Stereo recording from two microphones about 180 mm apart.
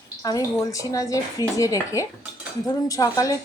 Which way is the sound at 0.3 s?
20° left (ahead or behind).